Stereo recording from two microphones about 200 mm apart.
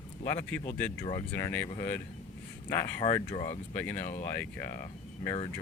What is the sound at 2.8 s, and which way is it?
Speech, 25° left (ahead or behind).